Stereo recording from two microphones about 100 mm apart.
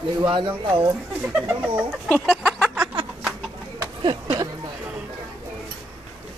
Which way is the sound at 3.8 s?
50° right (ahead or behind).